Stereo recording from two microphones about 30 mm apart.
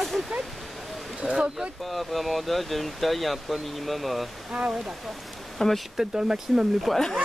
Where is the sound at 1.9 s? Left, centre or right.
Centre.